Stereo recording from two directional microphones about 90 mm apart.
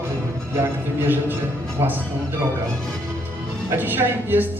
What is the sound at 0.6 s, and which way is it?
A man's voice, 25° right (ahead or behind).